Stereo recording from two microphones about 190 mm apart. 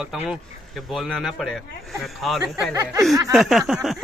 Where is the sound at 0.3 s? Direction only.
Centre (ahead or behind).